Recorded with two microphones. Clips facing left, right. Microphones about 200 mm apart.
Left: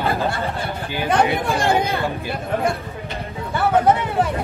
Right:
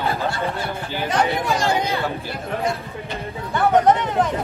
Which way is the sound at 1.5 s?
55° left (ahead or behind).